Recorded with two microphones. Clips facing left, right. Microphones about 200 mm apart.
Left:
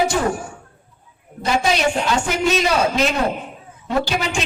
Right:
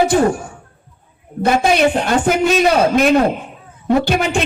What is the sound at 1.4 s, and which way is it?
A woman's voice, 55° right (ahead or behind).